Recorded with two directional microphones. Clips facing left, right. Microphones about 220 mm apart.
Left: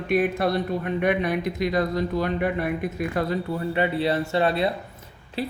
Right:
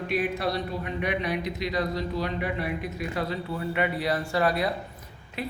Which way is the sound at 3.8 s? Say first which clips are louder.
Left 4 dB; 30° left (ahead or behind).